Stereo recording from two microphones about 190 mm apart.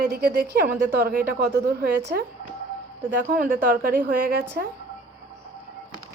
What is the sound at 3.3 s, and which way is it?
A woman's voice, 50° right (ahead or behind).